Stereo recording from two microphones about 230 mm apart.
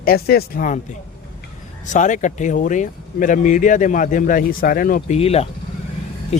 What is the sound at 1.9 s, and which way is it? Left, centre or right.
Speech, left.